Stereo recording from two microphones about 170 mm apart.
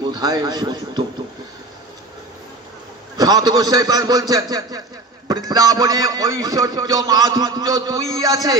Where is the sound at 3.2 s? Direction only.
25° right (ahead or behind).